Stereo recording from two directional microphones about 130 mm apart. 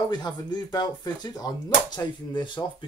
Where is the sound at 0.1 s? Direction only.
35° left (ahead or behind).